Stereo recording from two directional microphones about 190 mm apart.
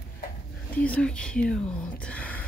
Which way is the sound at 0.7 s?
5° left (ahead or behind).